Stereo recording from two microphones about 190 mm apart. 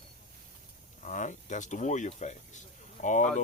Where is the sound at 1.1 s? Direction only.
40° left (ahead or behind).